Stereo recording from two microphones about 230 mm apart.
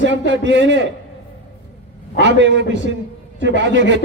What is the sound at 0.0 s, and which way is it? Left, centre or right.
Speech, right.